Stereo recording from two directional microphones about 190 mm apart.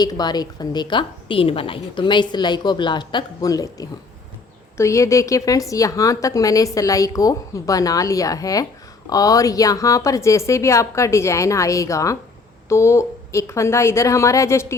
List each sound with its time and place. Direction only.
0.0 s a woman's voice: 20° left (ahead or behind)